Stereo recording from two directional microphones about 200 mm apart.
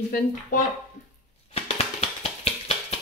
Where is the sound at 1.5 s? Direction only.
30° left (ahead or behind).